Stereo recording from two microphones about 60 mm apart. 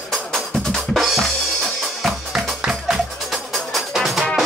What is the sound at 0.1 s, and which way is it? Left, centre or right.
Drum, centre.